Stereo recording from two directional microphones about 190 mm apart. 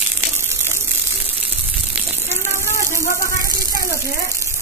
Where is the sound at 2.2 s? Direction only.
15° left (ahead or behind).